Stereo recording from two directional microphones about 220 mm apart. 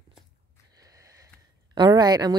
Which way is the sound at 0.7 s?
15° right (ahead or behind).